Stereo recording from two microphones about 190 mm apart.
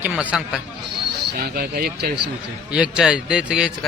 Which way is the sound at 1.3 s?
50° right (ahead or behind).